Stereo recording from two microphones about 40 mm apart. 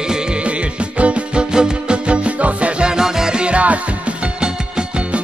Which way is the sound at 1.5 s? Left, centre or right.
Right.